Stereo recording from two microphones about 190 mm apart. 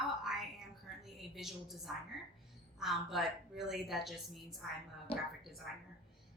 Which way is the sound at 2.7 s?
Centre (ahead or behind).